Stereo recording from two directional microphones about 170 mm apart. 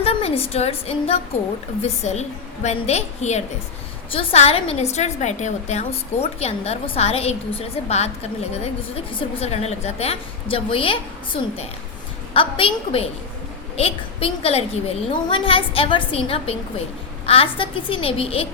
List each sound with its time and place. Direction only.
0.0 s a woman's voice: 35° left (ahead or behind)
9.1 s a woman's voice: 35° left (ahead or behind)
12.3 s a woman's voice: 30° left (ahead or behind)